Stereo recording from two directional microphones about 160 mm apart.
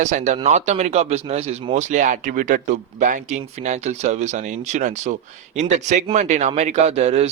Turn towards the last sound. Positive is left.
turn(degrees=-40)  # may be behind; listen again after turning